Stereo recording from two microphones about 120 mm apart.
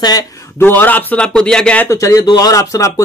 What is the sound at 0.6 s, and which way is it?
A man's voice, 15° left (ahead or behind).